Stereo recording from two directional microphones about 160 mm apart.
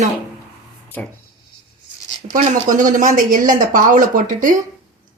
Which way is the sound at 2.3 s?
55° right (ahead or behind).